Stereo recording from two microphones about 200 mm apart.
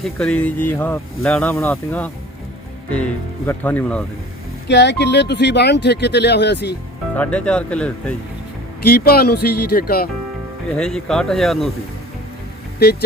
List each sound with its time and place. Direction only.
0.0 s speech: 5° left (ahead or behind)
4.7 s speech: 60° left (ahead or behind)
7.2 s speech: 5° left (ahead or behind)
8.8 s speech: 50° left (ahead or behind)
10.8 s speech: 5° left (ahead or behind)